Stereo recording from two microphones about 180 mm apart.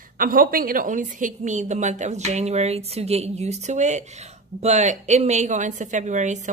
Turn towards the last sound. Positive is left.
turn(degrees=-40)  # may be behind; listen again after turning